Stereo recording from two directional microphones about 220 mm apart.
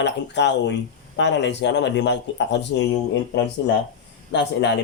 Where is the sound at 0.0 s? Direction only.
55° left (ahead or behind).